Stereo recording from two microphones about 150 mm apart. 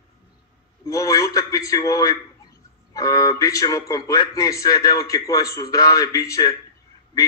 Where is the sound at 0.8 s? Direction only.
20° left (ahead or behind).